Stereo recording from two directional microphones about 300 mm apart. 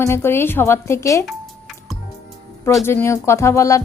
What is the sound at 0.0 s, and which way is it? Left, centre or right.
A woman's voice, centre.